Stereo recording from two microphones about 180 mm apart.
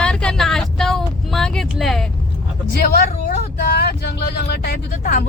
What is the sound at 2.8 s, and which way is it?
Speech, 50° left (ahead or behind).